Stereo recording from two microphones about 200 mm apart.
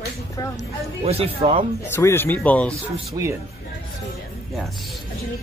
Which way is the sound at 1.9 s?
10° left (ahead or behind).